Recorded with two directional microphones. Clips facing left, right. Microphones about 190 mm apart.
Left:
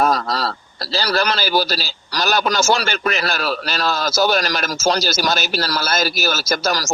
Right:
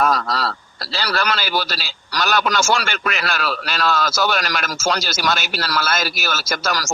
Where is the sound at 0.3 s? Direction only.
35° left (ahead or behind).